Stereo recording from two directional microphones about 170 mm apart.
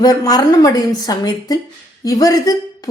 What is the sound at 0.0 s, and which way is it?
Speech, 20° left (ahead or behind).